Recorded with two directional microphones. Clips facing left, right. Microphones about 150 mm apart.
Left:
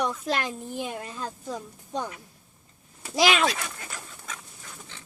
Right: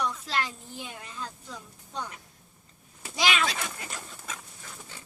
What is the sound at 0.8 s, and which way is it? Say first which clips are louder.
A woman's voice: left 4 dB; 40° left (ahead or behind).